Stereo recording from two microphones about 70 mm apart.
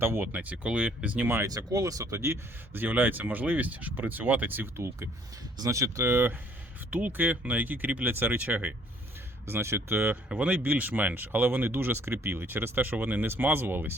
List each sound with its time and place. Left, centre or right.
0.0 s speech: right
0.3 s speech: right
1.5 s speech: right
2.8 s speech: right
5.5 s speech: right
6.9 s speech: right
9.5 s speech: right
10.2 s speech: centre